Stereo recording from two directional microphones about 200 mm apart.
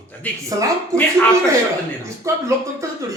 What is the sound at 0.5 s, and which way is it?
Speech, 20° right (ahead or behind).